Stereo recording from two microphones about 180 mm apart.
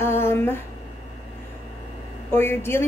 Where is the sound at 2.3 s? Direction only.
15° left (ahead or behind).